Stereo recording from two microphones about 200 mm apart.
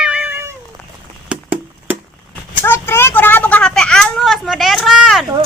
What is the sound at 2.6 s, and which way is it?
Speech, 10° left (ahead or behind).